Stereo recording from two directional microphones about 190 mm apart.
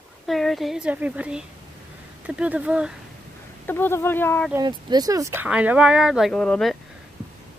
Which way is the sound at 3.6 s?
10° left (ahead or behind).